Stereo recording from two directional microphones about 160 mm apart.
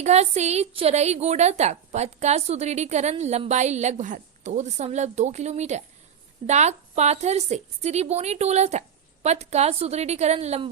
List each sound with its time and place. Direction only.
0.0 s a woman's voice: 45° right (ahead or behind)